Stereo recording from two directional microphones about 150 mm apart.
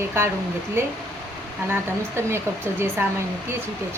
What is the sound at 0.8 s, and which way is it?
A woman's voice, 15° right (ahead or behind).